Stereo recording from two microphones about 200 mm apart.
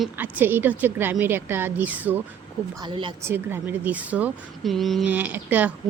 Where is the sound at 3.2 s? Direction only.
10° right (ahead or behind).